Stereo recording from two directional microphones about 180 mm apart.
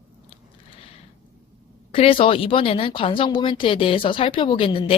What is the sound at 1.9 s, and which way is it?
Speech, 30° left (ahead or behind).